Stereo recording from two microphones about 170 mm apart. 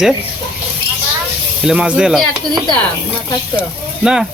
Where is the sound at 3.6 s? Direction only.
5° right (ahead or behind).